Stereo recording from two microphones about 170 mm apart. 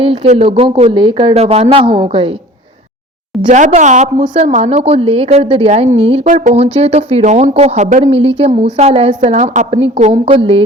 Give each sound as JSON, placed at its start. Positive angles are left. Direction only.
{"t": 0.0, "sound": "a woman's voice", "side_deg": -40}
{"t": 3.4, "sound": "a woman's voice", "side_deg": -45}
{"t": 6.2, "sound": "a woman's voice", "side_deg": -50}
{"t": 10.0, "sound": "a woman's voice", "side_deg": -35}